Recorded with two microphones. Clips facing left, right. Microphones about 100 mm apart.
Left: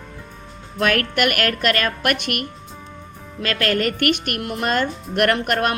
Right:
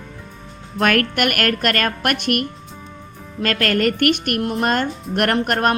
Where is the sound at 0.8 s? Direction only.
45° right (ahead or behind).